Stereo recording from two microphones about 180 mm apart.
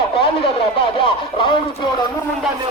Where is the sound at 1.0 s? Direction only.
30° left (ahead or behind).